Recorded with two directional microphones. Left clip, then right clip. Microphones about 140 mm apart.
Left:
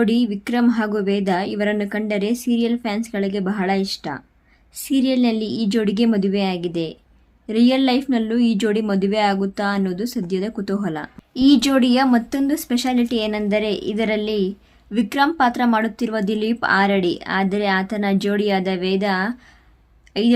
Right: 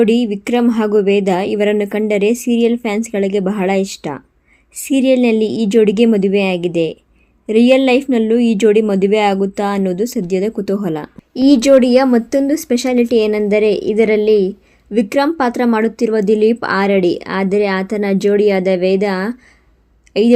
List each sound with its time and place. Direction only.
0.0 s speech: 30° right (ahead or behind)